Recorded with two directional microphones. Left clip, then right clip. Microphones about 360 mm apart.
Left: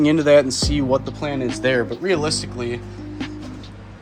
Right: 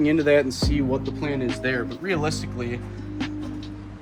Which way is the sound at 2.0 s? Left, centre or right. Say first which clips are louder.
Left 5 dB; centre.